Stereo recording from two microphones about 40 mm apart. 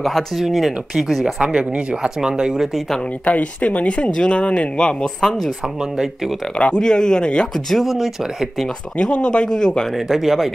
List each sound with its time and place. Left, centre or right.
0.0 s speech: centre
1.2 s speech: right
3.3 s speech: left
6.8 s speech: centre
7.5 s speech: centre
8.9 s speech: left
9.9 s speech: centre